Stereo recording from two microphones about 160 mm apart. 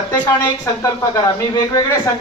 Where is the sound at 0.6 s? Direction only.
20° left (ahead or behind).